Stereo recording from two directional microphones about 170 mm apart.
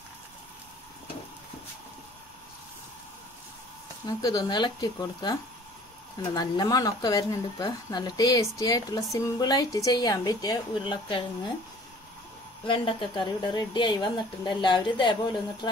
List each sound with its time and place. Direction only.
4.0 s speech: 25° left (ahead or behind)
12.6 s speech: 30° left (ahead or behind)